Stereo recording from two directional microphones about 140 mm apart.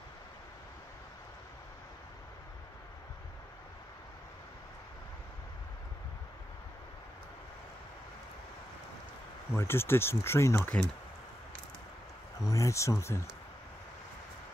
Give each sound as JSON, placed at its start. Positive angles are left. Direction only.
{"t": 9.5, "sound": "speech", "side_deg": 15}
{"t": 12.4, "sound": "speech", "side_deg": 20}